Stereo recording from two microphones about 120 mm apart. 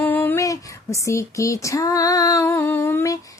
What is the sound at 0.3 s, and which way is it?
Female singing, 25° left (ahead or behind).